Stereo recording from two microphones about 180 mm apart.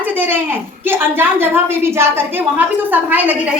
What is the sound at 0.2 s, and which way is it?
A woman's voice, 10° right (ahead or behind).